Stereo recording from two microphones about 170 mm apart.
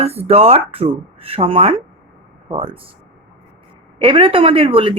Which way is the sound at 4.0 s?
30° right (ahead or behind).